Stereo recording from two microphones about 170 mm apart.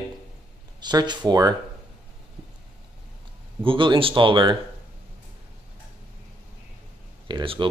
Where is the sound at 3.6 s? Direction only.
30° right (ahead or behind).